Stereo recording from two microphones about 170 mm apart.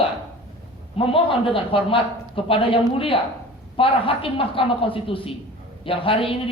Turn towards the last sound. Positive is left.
turn(degrees=30)  # may be behind; listen again after turning